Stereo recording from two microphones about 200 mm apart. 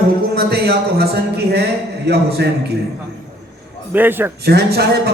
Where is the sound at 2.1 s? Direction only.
55° right (ahead or behind).